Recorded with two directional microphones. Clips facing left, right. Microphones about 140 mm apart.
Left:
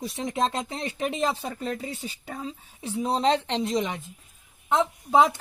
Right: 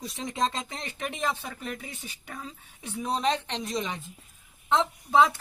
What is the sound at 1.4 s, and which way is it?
A woman's voice, 30° left (ahead or behind).